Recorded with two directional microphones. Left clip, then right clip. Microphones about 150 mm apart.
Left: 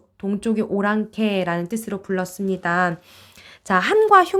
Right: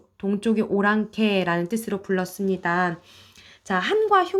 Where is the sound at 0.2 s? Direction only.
10° left (ahead or behind).